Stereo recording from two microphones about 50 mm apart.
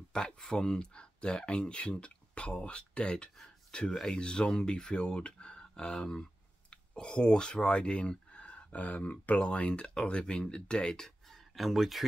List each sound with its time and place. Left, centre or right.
0.1 s speech: centre
3.9 s speech: centre
4.2 s speech: centre